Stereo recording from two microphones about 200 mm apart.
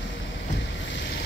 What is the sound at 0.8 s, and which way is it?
Boat, 65° left (ahead or behind).